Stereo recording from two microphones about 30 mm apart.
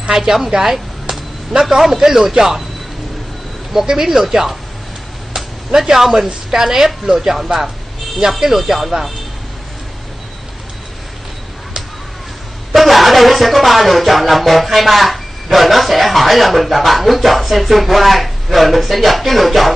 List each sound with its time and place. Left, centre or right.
0.1 s speech: centre
0.6 s a sound: centre
1.5 s speech: centre
3.8 s speech: centre
5.9 s speech: centre
12.7 s music: centre